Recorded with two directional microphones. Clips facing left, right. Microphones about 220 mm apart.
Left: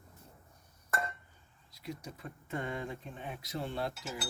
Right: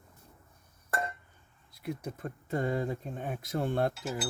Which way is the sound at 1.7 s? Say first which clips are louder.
Right 6 dB; 55° right (ahead or behind).